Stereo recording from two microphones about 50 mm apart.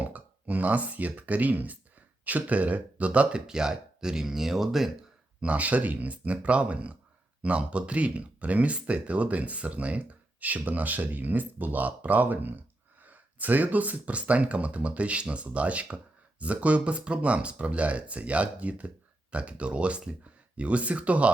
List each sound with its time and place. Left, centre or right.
0.0 s speech: right; by 4.9 s centre
5.4 s speech: right